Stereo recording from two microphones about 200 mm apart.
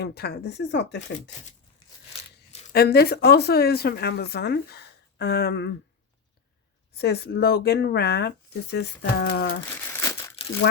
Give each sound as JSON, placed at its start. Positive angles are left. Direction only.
{"t": 0.0, "sound": "speech", "side_deg": 55}
{"t": 2.1, "sound": "tearing", "side_deg": 30}
{"t": 2.7, "sound": "speech", "side_deg": 50}
{"t": 6.9, "sound": "speech", "side_deg": 55}
{"t": 9.9, "sound": "crumpling", "side_deg": 15}